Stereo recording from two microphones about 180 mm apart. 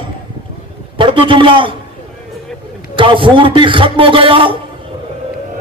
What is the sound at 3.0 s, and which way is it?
A man's voice, 30° right (ahead or behind).